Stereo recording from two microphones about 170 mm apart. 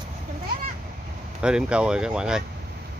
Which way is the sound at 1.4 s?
5° right (ahead or behind).